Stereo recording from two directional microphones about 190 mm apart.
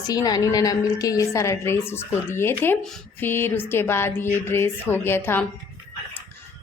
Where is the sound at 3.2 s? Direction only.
10° left (ahead or behind).